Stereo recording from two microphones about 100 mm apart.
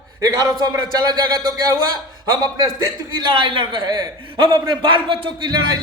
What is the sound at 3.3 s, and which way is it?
A man's voice, 60° right (ahead or behind).